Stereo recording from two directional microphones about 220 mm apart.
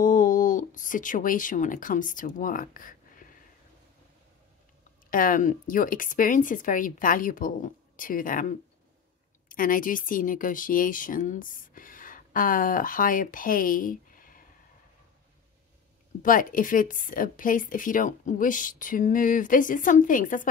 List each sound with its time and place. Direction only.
0.0 s speech: 35° left (ahead or behind)
5.1 s speech: 40° left (ahead or behind)
16.2 s speech: 40° left (ahead or behind)